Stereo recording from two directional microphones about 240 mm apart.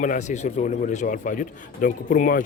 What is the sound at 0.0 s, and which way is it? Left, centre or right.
A man's voice, left.